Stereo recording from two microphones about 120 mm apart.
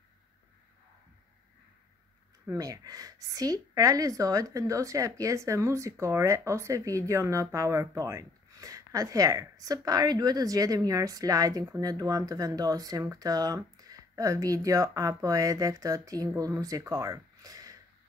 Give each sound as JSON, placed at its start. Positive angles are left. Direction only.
{"t": 2.5, "sound": "speech", "side_deg": -30}